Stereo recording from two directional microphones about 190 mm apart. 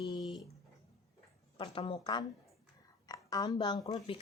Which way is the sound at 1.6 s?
30° left (ahead or behind).